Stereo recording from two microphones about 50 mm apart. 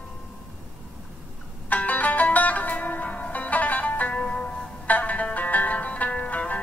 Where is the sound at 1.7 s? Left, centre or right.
Left.